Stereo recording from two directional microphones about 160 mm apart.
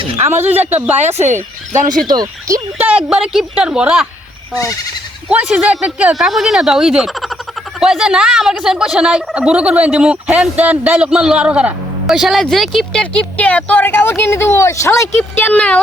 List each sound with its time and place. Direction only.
0.3 s speech: 10° right (ahead or behind)
0.9 s speech: 45° right (ahead or behind)
2.0 s speech: 25° right (ahead or behind)
2.7 s speech: 10° right (ahead or behind)
5.3 s speech: 5° right (ahead or behind)